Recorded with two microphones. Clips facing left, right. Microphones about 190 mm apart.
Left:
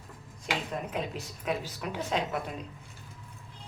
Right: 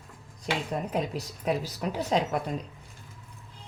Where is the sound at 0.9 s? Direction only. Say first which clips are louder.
Right 4 dB; 40° right (ahead or behind).